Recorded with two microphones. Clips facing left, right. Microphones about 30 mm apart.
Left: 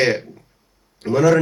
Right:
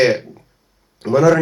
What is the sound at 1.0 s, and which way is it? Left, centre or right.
Speech, right.